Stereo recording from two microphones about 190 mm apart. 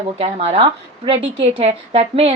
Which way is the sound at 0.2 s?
30° right (ahead or behind).